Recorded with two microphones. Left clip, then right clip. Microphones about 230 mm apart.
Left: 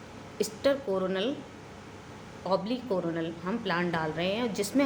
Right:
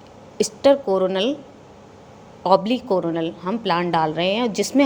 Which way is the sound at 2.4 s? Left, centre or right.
Right.